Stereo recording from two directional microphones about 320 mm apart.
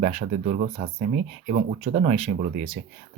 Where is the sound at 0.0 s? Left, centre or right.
Right.